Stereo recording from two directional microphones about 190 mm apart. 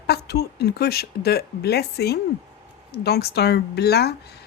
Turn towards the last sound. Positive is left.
turn(degrees=60)  # may be behind; listen again after turning